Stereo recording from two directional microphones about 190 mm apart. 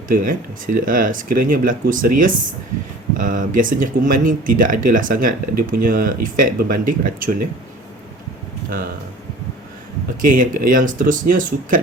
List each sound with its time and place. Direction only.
0.1 s speech: 45° right (ahead or behind)
10.2 s speech: 45° right (ahead or behind)